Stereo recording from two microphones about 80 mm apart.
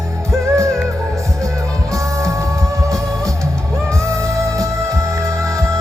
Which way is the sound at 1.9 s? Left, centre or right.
Right.